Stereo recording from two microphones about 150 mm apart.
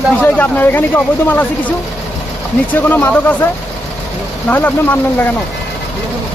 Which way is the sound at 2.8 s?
15° left (ahead or behind).